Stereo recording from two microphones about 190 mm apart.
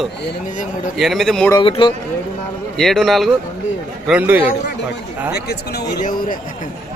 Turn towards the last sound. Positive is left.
turn(degrees=45)  # may be behind; listen again after turning